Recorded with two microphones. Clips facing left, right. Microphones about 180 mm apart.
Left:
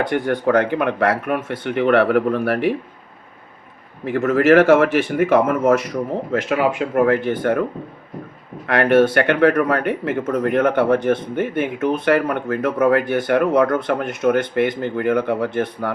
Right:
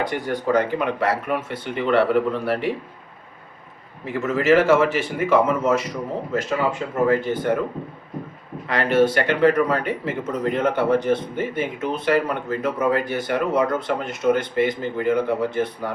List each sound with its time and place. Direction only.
0.0 s speech: 60° left (ahead or behind)
4.0 s speech: 55° left (ahead or behind)
8.6 s speech: 60° left (ahead or behind)